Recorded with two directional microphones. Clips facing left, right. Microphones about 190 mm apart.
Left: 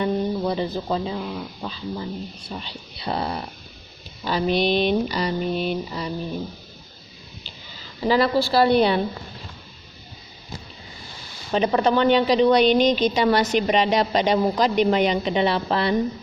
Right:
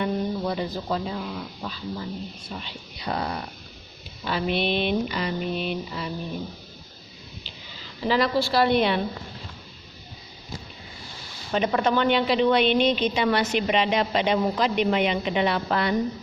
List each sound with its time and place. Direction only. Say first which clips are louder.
0.0 s a woman's voice: left 3 dB; 30° left (ahead or behind)
8.0 s a woman's voice: left 3 dB; 35° left (ahead or behind)
11.5 s a woman's voice: left 3 dB; 35° left (ahead or behind)